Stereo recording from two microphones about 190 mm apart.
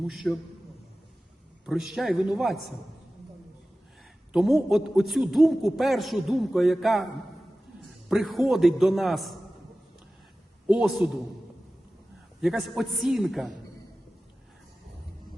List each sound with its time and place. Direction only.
0.0 s a man's voice: centre (ahead or behind)
1.6 s a man's voice: centre (ahead or behind)
4.3 s a man's voice: centre (ahead or behind)
8.1 s a man's voice: centre (ahead or behind)
10.7 s a man's voice: centre (ahead or behind)
12.4 s a man's voice: centre (ahead or behind)